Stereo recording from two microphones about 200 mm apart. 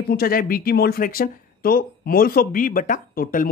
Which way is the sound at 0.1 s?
45° left (ahead or behind).